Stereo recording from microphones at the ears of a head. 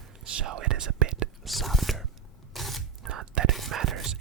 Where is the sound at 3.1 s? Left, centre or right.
Right.